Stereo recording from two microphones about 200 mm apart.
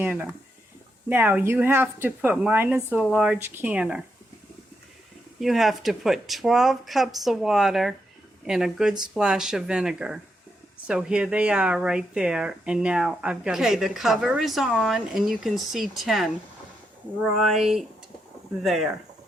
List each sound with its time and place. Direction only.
0.0 s speech: 10° right (ahead or behind)
5.4 s speech: centre (ahead or behind)
17.3 s speech: centre (ahead or behind)